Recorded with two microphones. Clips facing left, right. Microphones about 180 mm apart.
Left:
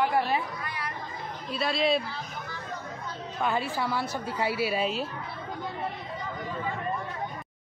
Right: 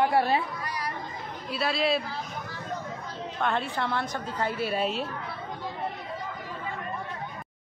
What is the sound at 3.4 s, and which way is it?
A man's voice, 5° left (ahead or behind).